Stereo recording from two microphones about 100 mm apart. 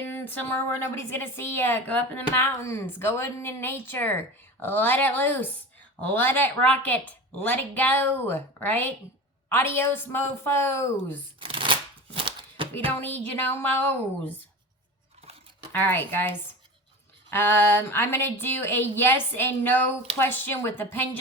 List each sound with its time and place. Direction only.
0.2 s a woman's voice: 20° left (ahead or behind)
11.3 s shuffling cards: 60° right (ahead or behind)
13.0 s a woman's voice: 20° left (ahead or behind)
15.8 s a woman's voice: 20° left (ahead or behind)